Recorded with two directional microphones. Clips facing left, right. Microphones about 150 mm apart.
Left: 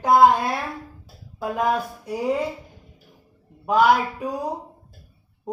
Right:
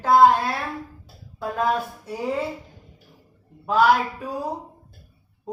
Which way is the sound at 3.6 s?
15° left (ahead or behind).